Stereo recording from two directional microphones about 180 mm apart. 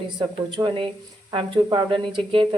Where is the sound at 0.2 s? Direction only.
25° right (ahead or behind).